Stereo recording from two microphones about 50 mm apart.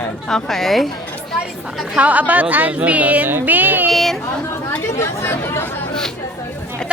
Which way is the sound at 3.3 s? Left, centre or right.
Right.